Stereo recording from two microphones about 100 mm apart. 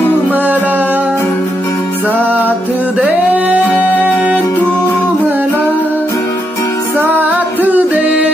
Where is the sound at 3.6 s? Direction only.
15° left (ahead or behind).